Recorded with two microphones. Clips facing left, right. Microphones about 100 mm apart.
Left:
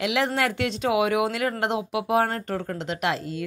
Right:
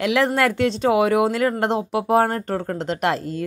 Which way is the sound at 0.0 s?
40° right (ahead or behind).